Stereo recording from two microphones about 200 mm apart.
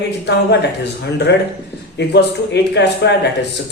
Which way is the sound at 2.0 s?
60° left (ahead or behind).